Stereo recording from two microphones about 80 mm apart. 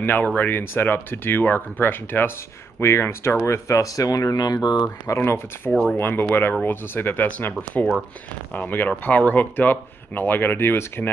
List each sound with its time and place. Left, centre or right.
0.0 s speech: left
5.0 s speech: left
5.7 s speech: centre
5.9 s speech: left